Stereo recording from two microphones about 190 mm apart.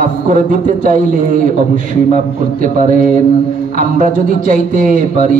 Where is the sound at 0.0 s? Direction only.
45° right (ahead or behind).